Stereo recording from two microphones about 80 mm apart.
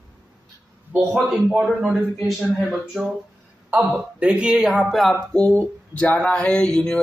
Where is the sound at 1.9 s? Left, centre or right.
Centre.